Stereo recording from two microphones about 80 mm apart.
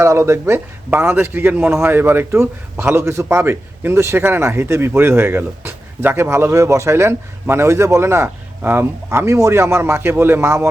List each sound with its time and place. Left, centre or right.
0.0 s a man's voice: right